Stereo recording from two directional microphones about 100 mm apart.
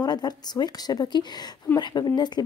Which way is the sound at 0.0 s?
45° left (ahead or behind).